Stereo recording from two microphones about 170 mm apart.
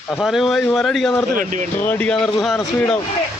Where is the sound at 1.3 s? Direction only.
50° right (ahead or behind).